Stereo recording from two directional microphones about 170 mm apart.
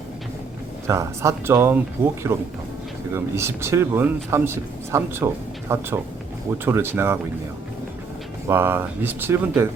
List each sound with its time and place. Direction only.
0.9 s speech: 15° right (ahead or behind)
8.4 s speech: 15° right (ahead or behind)